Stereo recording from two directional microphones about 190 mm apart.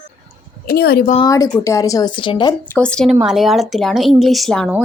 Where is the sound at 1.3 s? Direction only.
20° left (ahead or behind).